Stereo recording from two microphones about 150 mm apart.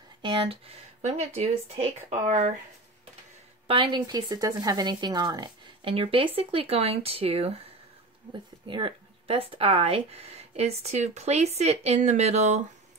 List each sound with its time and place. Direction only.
0.2 s speech: 30° right (ahead or behind)
2.0 s speech: 55° right (ahead or behind)
3.6 s speech: 35° right (ahead or behind)